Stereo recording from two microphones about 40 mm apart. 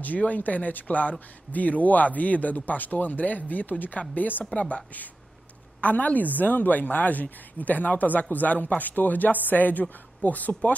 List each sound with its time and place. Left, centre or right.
0.0 s a woman's voice: left
4.6 s a woman's voice: left